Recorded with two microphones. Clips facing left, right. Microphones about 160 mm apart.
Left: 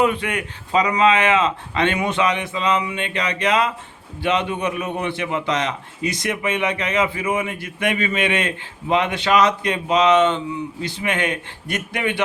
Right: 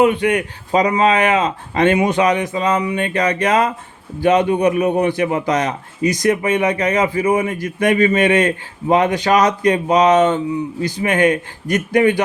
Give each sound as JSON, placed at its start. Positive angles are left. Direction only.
{"t": 0.0, "sound": "speech", "side_deg": -30}